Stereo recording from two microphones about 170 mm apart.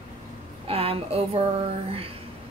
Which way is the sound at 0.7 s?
35° right (ahead or behind).